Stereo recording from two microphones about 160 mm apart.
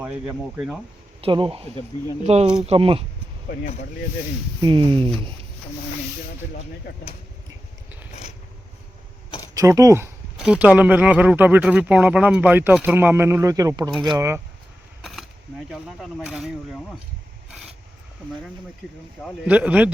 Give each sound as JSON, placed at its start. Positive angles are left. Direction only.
{"t": 0.0, "sound": "speech", "side_deg": -10}
{"t": 1.2, "sound": "speech", "side_deg": -30}
{"t": 4.6, "sound": "speech", "side_deg": -30}
{"t": 9.6, "sound": "speech", "side_deg": -20}
{"t": 10.3, "sound": "speech", "side_deg": -5}
{"t": 15.7, "sound": "speech", "side_deg": -5}
{"t": 19.5, "sound": "speech", "side_deg": -10}